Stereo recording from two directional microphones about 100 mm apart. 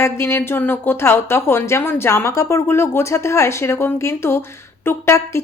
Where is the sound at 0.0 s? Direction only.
25° left (ahead or behind).